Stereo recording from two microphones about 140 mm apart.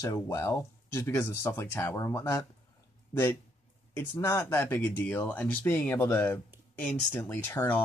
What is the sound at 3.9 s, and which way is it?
Speech, 15° left (ahead or behind).